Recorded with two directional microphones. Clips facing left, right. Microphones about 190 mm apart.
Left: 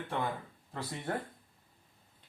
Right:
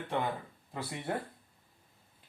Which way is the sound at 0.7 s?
15° right (ahead or behind).